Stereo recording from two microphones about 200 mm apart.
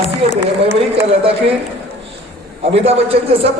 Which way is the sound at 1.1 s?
30° right (ahead or behind).